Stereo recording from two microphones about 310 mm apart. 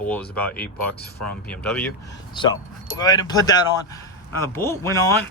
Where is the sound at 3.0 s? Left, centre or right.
Centre.